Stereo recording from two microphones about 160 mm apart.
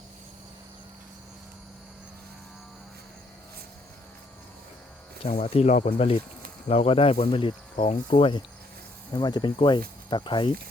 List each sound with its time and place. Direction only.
5.4 s speech: 45° left (ahead or behind); by 10.5 s 30° left (ahead or behind)